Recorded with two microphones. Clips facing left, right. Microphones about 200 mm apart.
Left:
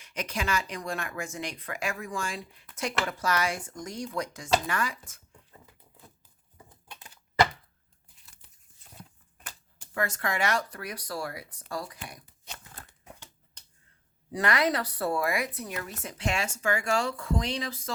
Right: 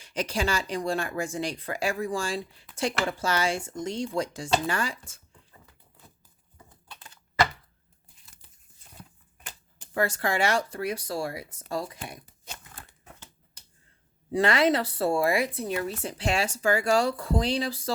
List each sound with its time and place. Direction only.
0.0 s speech: 30° right (ahead or behind)
9.9 s speech: 30° right (ahead or behind)
14.3 s speech: 25° right (ahead or behind)